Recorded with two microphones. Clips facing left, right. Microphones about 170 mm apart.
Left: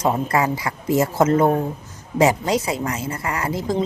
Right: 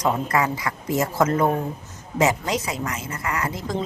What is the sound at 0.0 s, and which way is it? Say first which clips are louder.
A woman's voice: left 2 dB; 30° left (ahead or behind).